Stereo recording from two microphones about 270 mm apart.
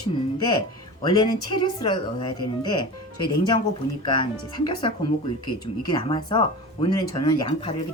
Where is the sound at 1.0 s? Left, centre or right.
Centre.